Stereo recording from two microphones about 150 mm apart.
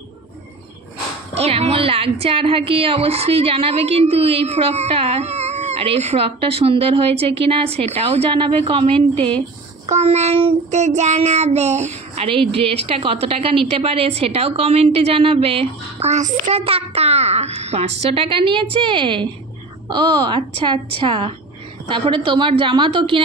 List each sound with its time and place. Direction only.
1.3 s a woman's voice: 45° right (ahead or behind)
9.8 s child singing: 45° right (ahead or behind)
19.9 s a woman's voice: 30° right (ahead or behind)